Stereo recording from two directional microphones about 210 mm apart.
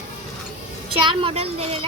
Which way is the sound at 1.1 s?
25° right (ahead or behind).